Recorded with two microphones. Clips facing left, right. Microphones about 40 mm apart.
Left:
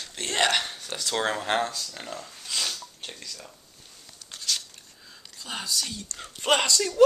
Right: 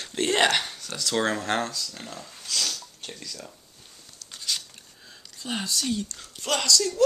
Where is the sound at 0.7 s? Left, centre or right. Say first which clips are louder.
Left 1 dB; left.